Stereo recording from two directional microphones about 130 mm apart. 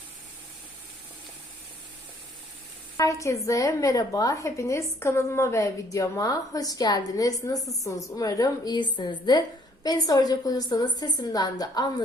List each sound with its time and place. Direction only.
3.0 s a woman's voice: 25° left (ahead or behind)